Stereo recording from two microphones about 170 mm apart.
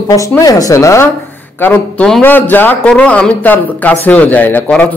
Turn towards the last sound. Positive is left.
turn(degrees=5)  # may be behind; listen again after turning